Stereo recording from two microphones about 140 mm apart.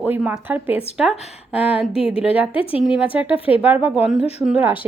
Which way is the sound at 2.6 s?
45° left (ahead or behind).